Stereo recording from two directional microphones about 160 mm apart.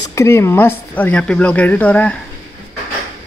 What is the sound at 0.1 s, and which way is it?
Speech, 15° left (ahead or behind).